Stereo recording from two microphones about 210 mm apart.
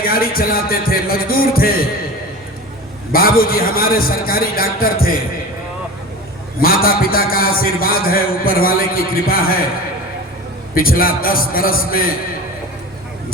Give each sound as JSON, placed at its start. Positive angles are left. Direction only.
{"t": 0.0, "sound": "a man's voice", "side_deg": 45}
{"t": 3.1, "sound": "a man's voice", "side_deg": 45}
{"t": 6.6, "sound": "a man's voice", "side_deg": 45}
{"t": 10.8, "sound": "a man's voice", "side_deg": 45}